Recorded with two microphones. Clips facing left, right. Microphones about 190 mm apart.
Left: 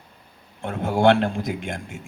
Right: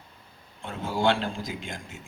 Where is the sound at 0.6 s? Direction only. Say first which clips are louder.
Left 7 dB; 65° left (ahead or behind).